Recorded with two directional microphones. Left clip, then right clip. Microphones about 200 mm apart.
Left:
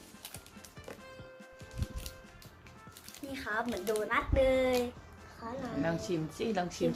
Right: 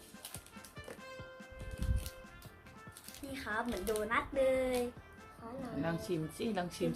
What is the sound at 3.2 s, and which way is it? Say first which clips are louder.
Speech: left 3 dB; centre (ahead or behind).